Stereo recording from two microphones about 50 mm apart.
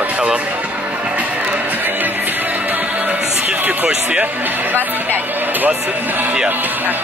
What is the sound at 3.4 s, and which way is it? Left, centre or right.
Music, right.